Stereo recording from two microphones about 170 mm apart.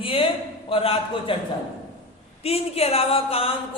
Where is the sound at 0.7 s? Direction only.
35° left (ahead or behind).